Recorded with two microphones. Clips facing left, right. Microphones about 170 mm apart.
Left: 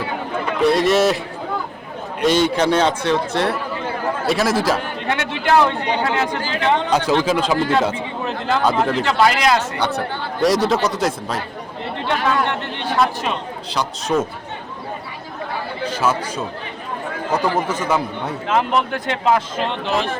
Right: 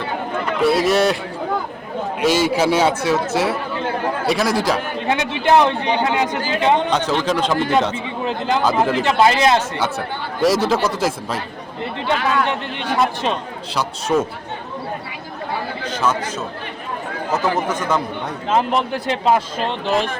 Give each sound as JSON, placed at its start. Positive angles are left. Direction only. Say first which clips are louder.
{"t": 0.6, "sound": "a man's voice", "louder": "left 1 dB", "side_deg": 0}
{"t": 2.2, "sound": "a man's voice", "louder": "left 1 dB", "side_deg": -5}
{"t": 5.0, "sound": "speech", "louder": "right 3 dB", "side_deg": -20}
{"t": 6.9, "sound": "speech", "louder": "left 2 dB", "side_deg": 10}
{"t": 8.2, "sound": "speech", "louder": "right 1 dB", "side_deg": -20}
{"t": 9.7, "sound": "a man's voice", "louder": "left 1 dB", "side_deg": -5}
{"t": 12.0, "sound": "speech", "louder": "even", "side_deg": -20}
{"t": 13.7, "sound": "a man's voice", "louder": "right 1 dB", "side_deg": 0}
{"t": 15.8, "sound": "a man's voice", "louder": "left 2 dB", "side_deg": 10}
{"t": 17.3, "sound": "speech", "louder": "even", "side_deg": 10}
{"t": 18.4, "sound": "speech", "louder": "right 1 dB", "side_deg": -25}